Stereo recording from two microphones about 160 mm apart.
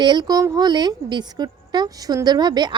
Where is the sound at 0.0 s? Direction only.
25° right (ahead or behind).